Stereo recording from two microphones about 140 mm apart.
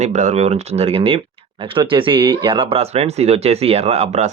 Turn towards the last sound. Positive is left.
turn(degrees=-50)  # may be behind; listen again after turning